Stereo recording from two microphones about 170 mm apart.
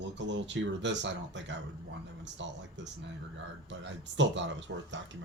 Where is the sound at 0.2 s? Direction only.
90° right.